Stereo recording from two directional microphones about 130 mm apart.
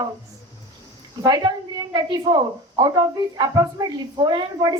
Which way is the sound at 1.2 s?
30° right (ahead or behind).